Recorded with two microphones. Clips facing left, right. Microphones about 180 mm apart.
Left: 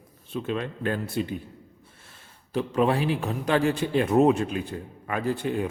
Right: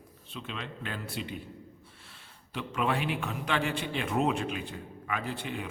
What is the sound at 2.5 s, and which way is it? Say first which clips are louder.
A man's voice: left 8 dB; 35° left (ahead or behind).